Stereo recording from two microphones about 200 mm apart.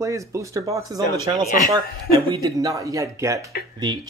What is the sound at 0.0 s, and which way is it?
Speech, 15° right (ahead or behind).